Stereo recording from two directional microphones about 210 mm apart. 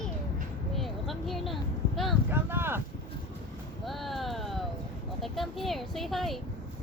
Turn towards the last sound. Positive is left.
turn(degrees=0)  # may be behind; listen again after turning